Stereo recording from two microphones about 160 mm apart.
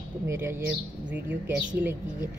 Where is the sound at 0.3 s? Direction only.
15° right (ahead or behind).